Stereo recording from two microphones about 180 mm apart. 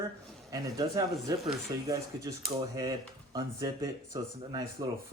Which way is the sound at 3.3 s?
20° right (ahead or behind).